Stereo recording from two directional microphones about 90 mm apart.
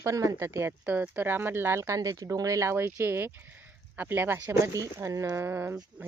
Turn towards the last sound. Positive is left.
turn(degrees=-25)  # may be behind; listen again after turning